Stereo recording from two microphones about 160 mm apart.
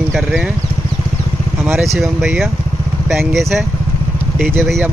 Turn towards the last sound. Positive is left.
turn(degrees=0)  # may be behind; listen again after turning